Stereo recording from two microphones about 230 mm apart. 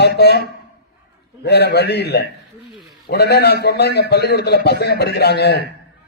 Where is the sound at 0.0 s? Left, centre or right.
Left.